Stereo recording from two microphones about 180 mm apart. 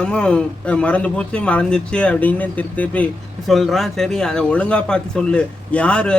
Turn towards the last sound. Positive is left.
turn(degrees=5)  # may be behind; listen again after turning